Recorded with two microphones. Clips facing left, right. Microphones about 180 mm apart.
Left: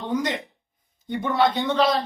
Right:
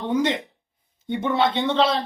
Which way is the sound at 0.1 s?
25° right (ahead or behind).